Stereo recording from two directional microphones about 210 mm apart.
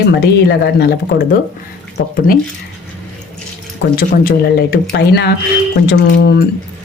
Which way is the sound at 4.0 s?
45° left (ahead or behind).